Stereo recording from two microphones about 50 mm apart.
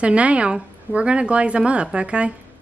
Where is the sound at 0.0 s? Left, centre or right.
Right.